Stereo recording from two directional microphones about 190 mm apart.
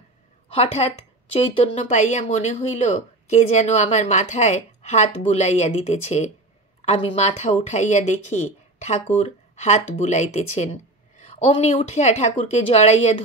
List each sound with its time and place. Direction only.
1.4 s speech: 35° left (ahead or behind)